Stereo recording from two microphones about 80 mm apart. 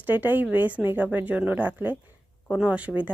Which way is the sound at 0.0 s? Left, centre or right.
Right.